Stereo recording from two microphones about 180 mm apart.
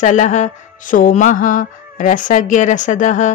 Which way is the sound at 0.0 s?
45° left (ahead or behind).